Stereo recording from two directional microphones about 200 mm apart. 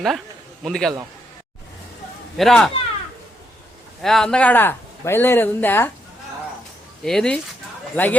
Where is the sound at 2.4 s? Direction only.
Centre (ahead or behind).